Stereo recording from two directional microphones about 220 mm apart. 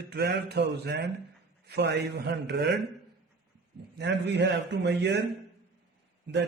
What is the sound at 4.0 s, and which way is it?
A man's voice, 50° right (ahead or behind).